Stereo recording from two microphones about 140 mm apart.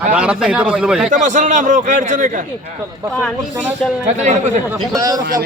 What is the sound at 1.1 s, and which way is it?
A man's voice, 60° right (ahead or behind).